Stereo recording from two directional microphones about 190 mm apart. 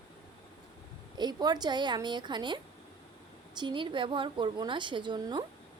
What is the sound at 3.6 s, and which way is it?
A woman's voice, 25° right (ahead or behind).